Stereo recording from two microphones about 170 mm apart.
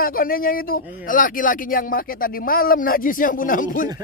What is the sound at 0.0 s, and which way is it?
Speech, 60° left (ahead or behind).